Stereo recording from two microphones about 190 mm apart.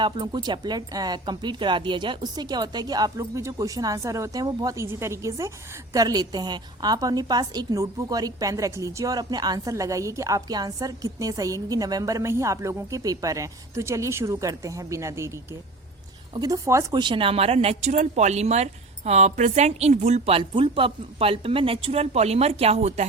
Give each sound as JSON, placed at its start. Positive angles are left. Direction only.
{"t": 0.0, "sound": "a woman's voice", "side_deg": -25}
{"t": 16.3, "sound": "a woman's voice", "side_deg": -20}